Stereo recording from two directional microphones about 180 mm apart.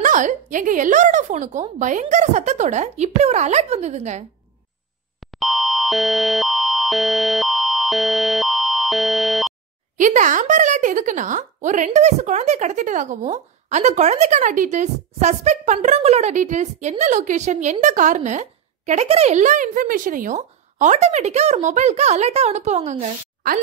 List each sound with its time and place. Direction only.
0.0 s a woman's voice: 45° right (ahead or behind)
5.2 s a sound: centre (ahead or behind)
9.9 s a woman's voice: 45° right (ahead or behind)